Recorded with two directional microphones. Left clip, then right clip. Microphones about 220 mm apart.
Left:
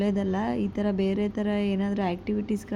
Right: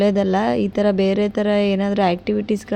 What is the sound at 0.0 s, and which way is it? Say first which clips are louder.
Speech: right 11 dB; 25° right (ahead or behind).